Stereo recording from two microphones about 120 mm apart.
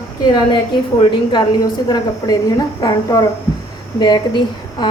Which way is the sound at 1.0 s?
40° left (ahead or behind).